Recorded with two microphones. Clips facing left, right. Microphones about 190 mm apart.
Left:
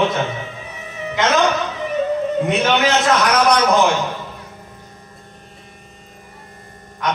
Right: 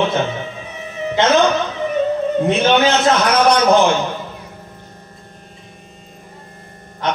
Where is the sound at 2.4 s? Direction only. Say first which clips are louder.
Right 5 dB; 30° right (ahead or behind).